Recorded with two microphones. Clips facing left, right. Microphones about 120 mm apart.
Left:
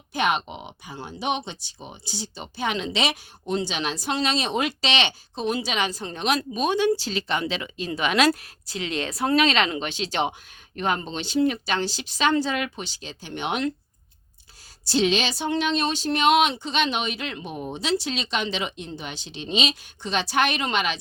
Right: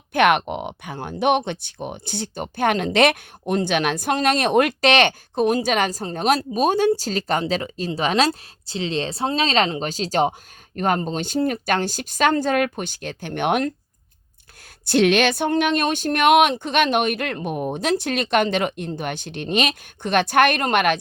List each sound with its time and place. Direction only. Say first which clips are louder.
0.1 s speech: right 7 dB; 60° right (ahead or behind)
14.8 s speech: right 6 dB; 60° right (ahead or behind)